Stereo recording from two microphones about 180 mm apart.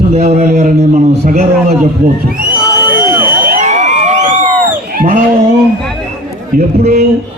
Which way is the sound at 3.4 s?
45° right (ahead or behind).